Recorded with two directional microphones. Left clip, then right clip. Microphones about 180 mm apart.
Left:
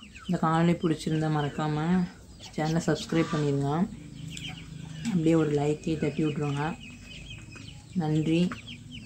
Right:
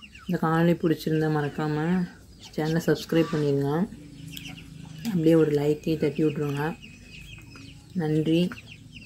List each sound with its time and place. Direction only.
0.3 s speech: 15° right (ahead or behind)
5.0 s speech: 20° right (ahead or behind)
8.0 s speech: 15° right (ahead or behind)